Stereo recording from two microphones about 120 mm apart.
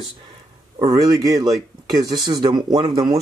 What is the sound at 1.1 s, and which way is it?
Speech, 30° right (ahead or behind).